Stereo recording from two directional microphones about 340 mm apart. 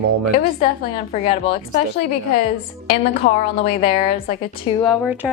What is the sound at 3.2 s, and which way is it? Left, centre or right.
A woman's voice, centre.